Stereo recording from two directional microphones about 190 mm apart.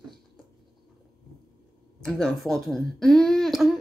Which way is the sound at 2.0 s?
5° left (ahead or behind).